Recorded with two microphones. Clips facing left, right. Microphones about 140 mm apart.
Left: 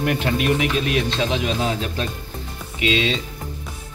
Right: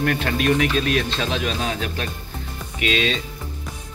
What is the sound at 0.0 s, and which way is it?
Speech, 20° left (ahead or behind).